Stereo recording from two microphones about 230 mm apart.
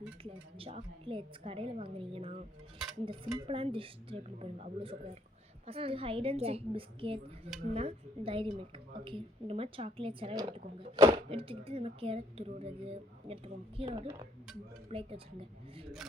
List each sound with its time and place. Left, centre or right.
0.2 s a woman's voice: right